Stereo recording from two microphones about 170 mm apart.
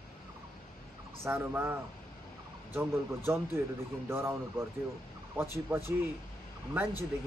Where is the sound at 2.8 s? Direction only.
15° right (ahead or behind).